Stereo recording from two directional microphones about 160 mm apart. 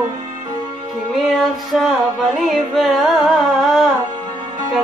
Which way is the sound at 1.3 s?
Centre (ahead or behind).